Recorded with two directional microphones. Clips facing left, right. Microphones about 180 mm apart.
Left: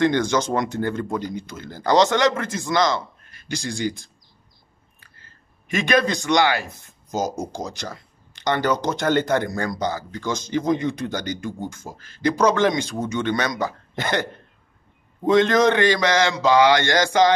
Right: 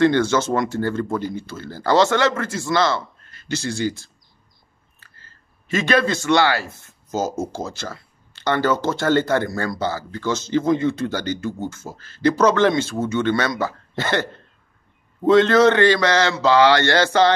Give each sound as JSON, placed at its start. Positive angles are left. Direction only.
{"t": 0.0, "sound": "a man's voice", "side_deg": 15}